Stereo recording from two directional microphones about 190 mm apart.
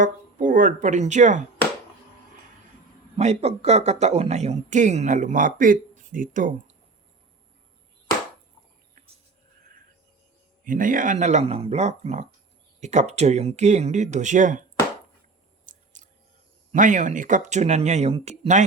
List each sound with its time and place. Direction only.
0.0 s speech: 45° right (ahead or behind)
3.2 s speech: 35° right (ahead or behind)
10.6 s speech: 45° right (ahead or behind)
15.6 s a sound: 40° right (ahead or behind)
16.7 s speech: 40° right (ahead or behind)